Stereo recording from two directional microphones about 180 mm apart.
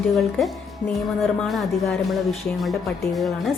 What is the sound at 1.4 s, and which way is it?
Speech, centre (ahead or behind).